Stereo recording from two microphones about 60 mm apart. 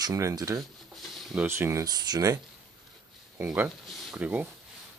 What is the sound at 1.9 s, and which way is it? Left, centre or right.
Speech, right.